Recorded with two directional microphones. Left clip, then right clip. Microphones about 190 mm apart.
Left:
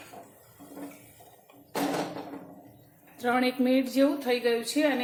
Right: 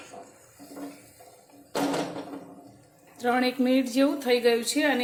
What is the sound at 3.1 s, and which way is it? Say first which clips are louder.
Speech: right 1 dB; 5° right (ahead or behind).